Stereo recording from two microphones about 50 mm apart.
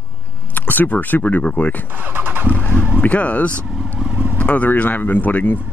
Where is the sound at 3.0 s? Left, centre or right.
Left.